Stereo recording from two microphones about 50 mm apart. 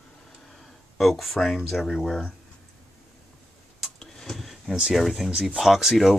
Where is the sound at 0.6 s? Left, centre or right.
Centre.